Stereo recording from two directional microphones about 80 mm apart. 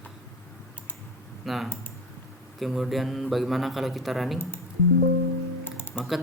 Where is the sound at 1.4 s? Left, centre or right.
Centre.